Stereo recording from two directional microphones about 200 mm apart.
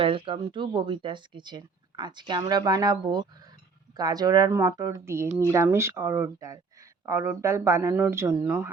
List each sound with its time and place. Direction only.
0.0 s speech: 25° right (ahead or behind); by 8.7 s 10° right (ahead or behind)